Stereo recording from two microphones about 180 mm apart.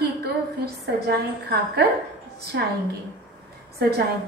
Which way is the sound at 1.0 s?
70° right (ahead or behind).